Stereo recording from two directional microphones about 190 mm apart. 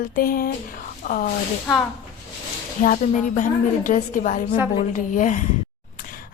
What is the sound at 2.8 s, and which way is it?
A woman's voice, 40° left (ahead or behind).